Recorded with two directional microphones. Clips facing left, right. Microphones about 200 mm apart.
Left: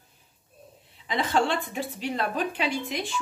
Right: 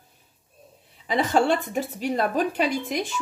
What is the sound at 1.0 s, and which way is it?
Speech, 45° right (ahead or behind).